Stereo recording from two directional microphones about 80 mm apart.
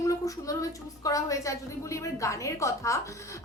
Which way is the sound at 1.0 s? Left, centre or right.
Left.